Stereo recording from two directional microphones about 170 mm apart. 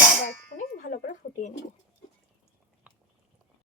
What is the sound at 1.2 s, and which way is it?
Speech, 70° left (ahead or behind).